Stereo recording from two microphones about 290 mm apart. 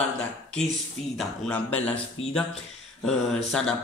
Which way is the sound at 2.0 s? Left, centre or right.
Left.